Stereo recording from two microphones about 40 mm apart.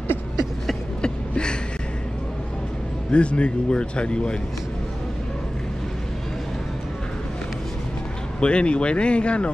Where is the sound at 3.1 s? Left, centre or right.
Left.